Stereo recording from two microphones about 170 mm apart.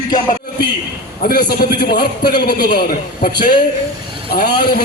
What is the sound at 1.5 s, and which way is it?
A man's voice, 70° left (ahead or behind).